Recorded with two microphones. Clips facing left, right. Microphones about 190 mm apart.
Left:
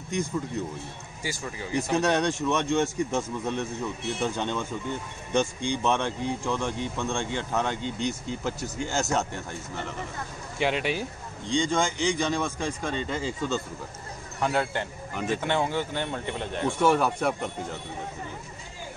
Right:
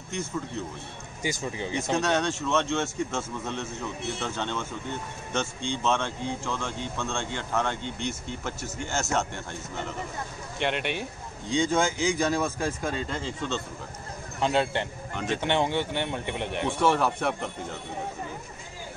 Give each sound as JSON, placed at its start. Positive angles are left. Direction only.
{"t": 0.6, "sound": "speech", "side_deg": 15}
{"t": 1.2, "sound": "speech", "side_deg": -20}
{"t": 2.0, "sound": "speech", "side_deg": 15}
{"t": 10.6, "sound": "speech", "side_deg": 0}
{"t": 14.4, "sound": "speech", "side_deg": -20}
{"t": 15.1, "sound": "speech", "side_deg": 5}
{"t": 15.4, "sound": "speech", "side_deg": -20}
{"t": 16.8, "sound": "speech", "side_deg": 0}